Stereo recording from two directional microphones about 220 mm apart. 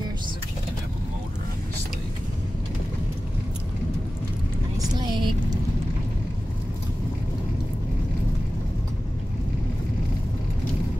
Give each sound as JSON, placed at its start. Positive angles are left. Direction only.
{"t": 4.7, "sound": "vehicle", "side_deg": -20}